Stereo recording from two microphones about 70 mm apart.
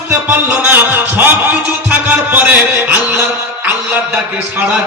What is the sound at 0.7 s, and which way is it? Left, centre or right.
Music, right.